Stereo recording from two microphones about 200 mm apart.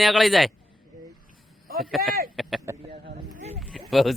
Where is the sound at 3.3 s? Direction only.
35° right (ahead or behind).